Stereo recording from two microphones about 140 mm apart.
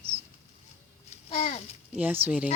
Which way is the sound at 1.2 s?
50° left (ahead or behind).